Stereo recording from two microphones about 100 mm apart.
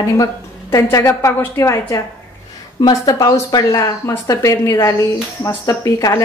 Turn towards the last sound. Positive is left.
turn(degrees=35)  # may be behind; listen again after turning